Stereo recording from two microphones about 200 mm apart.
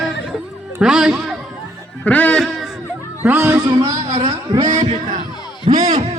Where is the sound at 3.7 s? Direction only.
25° right (ahead or behind).